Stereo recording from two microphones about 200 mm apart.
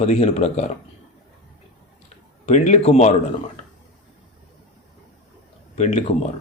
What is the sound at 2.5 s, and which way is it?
Speech, 35° left (ahead or behind).